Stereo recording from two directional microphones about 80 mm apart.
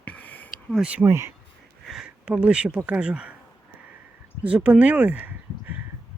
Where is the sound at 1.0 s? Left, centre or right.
Right.